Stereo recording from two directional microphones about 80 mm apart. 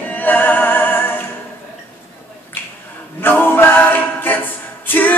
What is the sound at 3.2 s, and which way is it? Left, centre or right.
A capella, left.